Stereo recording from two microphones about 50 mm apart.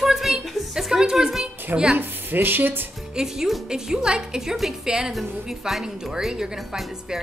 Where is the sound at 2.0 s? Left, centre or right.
Right.